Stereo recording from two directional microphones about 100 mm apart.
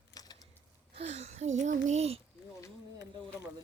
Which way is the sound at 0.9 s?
90° right.